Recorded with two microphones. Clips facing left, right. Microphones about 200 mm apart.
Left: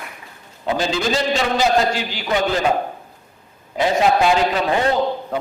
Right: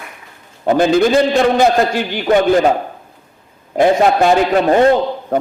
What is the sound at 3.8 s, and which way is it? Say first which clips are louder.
A man's voice: right 5 dB; 50° right (ahead or behind).